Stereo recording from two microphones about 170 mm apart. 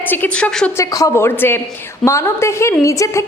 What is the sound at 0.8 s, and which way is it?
A woman's voice, 20° left (ahead or behind).